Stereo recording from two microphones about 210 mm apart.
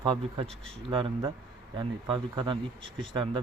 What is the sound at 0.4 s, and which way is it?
Speech, centre (ahead or behind).